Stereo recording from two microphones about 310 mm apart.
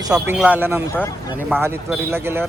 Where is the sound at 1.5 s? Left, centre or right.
Centre.